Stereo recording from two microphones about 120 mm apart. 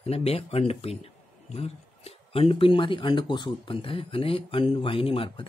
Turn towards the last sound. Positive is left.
turn(degrees=50)  # may be behind; listen again after turning